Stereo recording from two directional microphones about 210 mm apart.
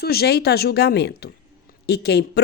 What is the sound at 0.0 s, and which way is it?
Speech, 50° left (ahead or behind).